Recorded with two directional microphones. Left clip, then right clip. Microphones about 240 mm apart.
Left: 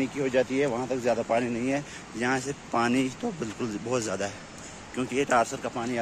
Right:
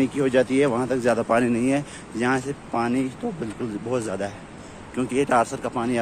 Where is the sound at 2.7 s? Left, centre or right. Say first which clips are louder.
Even; centre.